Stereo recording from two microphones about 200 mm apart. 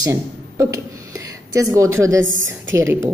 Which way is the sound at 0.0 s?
15° right (ahead or behind).